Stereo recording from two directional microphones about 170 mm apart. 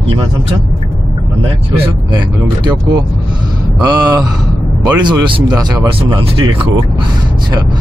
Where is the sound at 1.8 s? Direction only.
25° right (ahead or behind).